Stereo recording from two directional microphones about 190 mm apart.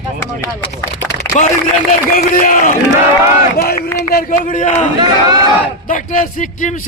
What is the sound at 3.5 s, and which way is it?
A man's voice, 55° left (ahead or behind).